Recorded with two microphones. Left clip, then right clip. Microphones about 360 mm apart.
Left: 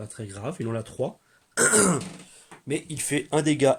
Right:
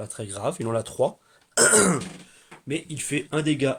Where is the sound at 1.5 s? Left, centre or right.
Centre.